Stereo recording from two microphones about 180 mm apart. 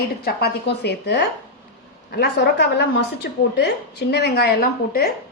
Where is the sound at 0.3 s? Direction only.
60° left (ahead or behind).